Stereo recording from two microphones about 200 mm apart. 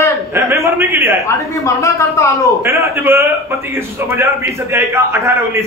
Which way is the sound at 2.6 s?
10° right (ahead or behind).